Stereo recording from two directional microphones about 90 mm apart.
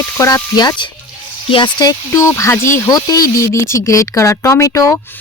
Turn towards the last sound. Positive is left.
turn(degrees=25)  # may be behind; listen again after turning